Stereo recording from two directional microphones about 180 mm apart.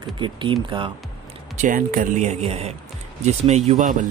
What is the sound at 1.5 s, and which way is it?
Speech, 45° right (ahead or behind).